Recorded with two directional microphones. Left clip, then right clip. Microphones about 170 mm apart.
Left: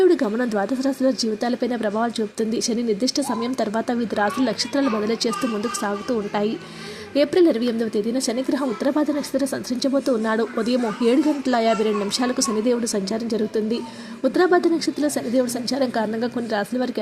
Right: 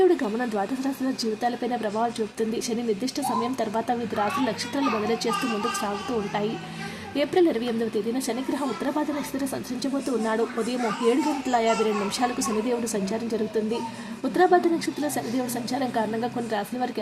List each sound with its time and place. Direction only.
0.0 s speech: 25° left (ahead or behind)
7.2 s speech: 25° left (ahead or behind)
8.8 s speech: 25° left (ahead or behind)
14.3 s speech: 25° left (ahead or behind)